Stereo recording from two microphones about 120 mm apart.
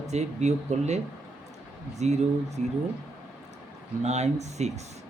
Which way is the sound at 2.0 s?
70° right (ahead or behind).